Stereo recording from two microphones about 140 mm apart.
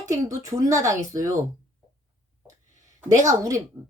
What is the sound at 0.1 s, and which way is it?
A woman's voice, 20° right (ahead or behind).